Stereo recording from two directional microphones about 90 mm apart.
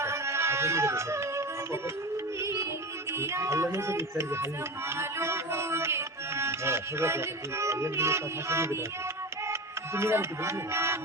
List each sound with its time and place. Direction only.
0.0 s music: 30° right (ahead or behind)
9.5 s speech: 30° right (ahead or behind)